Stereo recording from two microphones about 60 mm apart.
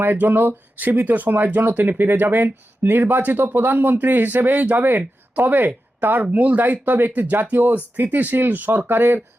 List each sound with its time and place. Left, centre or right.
0.0 s speech: right